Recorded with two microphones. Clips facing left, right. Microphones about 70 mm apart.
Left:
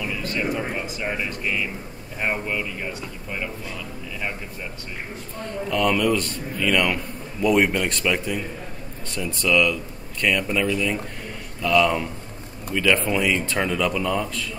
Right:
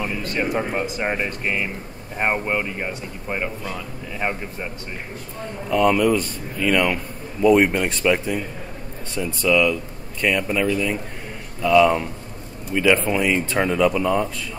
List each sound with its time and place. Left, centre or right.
0.0 s speech: right
5.7 s speech: centre
11.6 s speech: centre
12.9 s speech: centre